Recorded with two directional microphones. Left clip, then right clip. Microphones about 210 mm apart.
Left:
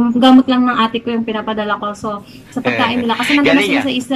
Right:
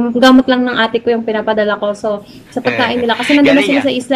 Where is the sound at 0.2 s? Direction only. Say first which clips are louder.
Right 2 dB; 10° left (ahead or behind).